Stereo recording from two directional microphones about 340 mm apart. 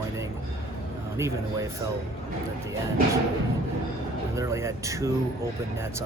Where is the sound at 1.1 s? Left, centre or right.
Centre.